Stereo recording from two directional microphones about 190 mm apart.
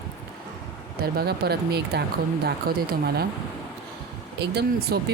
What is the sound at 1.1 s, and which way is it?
Speech, 55° right (ahead or behind).